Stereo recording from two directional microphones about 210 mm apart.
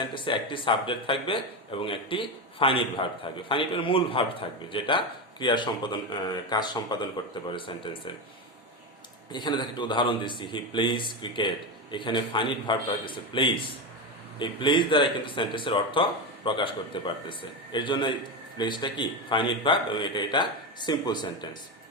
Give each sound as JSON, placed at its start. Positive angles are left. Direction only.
{"t": 0.0, "sound": "speech", "side_deg": 25}
{"t": 9.3, "sound": "speech", "side_deg": 20}